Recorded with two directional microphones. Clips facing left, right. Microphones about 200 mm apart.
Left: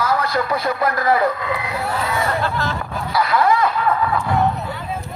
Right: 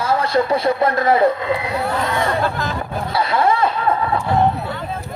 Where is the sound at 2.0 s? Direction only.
5° left (ahead or behind).